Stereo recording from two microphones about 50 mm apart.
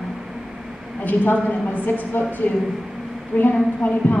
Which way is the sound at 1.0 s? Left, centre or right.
Left.